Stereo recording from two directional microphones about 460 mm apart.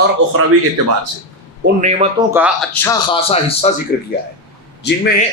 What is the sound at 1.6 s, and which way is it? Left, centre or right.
A man's voice, centre.